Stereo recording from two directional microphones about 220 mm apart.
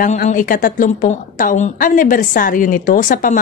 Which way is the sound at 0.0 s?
35° left (ahead or behind).